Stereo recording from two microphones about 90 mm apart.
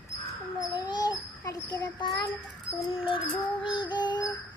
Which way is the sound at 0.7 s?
50° left (ahead or behind).